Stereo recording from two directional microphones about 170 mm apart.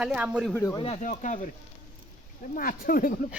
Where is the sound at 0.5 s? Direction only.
20° left (ahead or behind).